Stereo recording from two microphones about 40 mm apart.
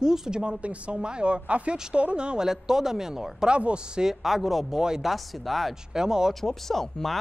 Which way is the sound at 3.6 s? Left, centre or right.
Right.